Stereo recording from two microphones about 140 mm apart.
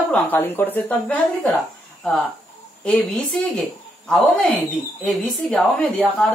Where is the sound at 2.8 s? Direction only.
10° left (ahead or behind).